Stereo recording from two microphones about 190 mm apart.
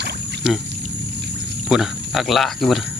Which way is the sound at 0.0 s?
65° right (ahead or behind).